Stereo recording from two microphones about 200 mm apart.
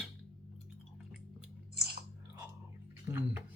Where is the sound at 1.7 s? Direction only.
55° right (ahead or behind).